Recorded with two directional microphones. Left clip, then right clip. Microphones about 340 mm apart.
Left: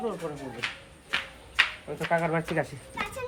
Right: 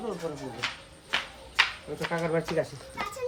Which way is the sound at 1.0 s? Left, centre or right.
Right.